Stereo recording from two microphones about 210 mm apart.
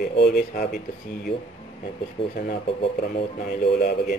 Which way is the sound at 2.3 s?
30° left (ahead or behind).